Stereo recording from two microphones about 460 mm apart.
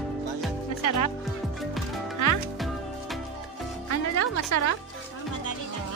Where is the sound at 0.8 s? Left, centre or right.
Left.